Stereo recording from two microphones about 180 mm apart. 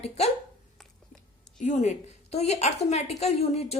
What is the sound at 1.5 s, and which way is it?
A woman's voice, 40° left (ahead or behind).